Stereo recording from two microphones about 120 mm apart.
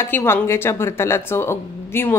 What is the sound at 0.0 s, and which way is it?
Speech, 20° left (ahead or behind).